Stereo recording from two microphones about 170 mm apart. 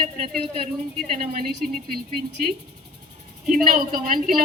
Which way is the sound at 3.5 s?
50° right (ahead or behind).